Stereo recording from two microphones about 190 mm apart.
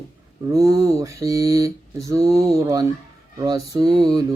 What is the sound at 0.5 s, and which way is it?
Mantra, 15° right (ahead or behind).